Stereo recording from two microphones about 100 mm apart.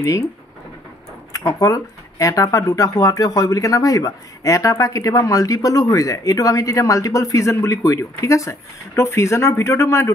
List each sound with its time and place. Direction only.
0.0 s speech: 30° left (ahead or behind)
1.3 s speech: 35° left (ahead or behind)